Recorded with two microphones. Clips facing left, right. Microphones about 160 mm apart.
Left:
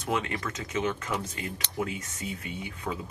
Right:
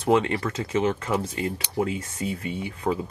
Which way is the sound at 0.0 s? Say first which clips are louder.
Right 9 dB; 30° right (ahead or behind).